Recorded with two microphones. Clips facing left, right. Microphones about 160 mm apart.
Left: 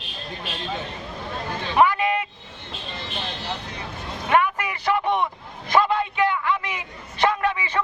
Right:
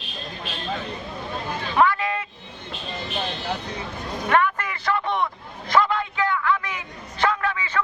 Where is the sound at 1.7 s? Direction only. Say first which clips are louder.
Left 2 dB; 15° left (ahead or behind).